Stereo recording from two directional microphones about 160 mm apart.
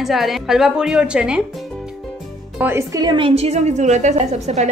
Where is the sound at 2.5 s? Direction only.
15° right (ahead or behind).